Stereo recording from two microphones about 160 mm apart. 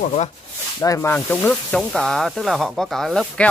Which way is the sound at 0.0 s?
45° left (ahead or behind).